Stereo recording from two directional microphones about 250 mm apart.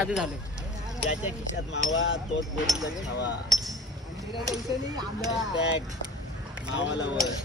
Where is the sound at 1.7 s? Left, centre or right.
Left.